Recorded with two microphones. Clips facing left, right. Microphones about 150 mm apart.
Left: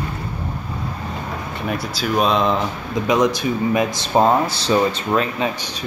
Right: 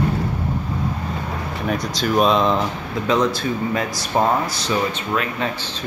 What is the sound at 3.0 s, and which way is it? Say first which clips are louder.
Speech: left 2 dB; 15° left (ahead or behind).